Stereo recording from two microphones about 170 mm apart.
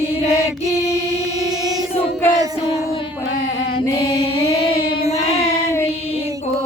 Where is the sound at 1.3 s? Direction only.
20° right (ahead or behind).